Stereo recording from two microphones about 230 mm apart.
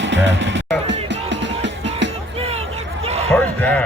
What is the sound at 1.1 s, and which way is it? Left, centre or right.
Music, right.